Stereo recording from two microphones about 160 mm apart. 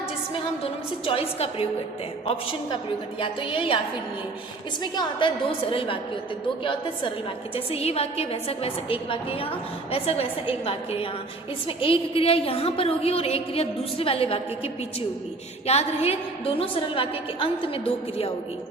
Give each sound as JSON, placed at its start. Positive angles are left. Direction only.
{"t": 0.3, "sound": "a woman's voice", "side_deg": 35}
{"t": 4.8, "sound": "a woman's voice", "side_deg": 30}
{"t": 7.5, "sound": "a woman's voice", "side_deg": 40}